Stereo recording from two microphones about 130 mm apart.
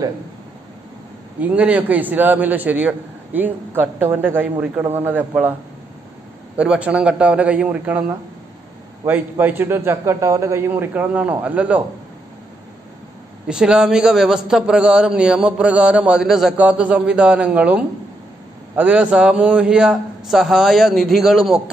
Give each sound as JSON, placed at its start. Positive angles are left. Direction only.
{"t": 1.4, "sound": "a man's voice", "side_deg": -10}
{"t": 9.0, "sound": "a man's voice", "side_deg": -15}
{"t": 13.5, "sound": "a man's voice", "side_deg": -5}